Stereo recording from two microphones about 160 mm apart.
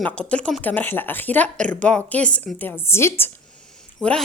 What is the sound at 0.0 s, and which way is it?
Speech, 5° left (ahead or behind).